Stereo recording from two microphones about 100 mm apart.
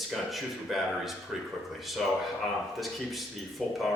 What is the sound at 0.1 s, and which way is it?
A man's voice, centre (ahead or behind).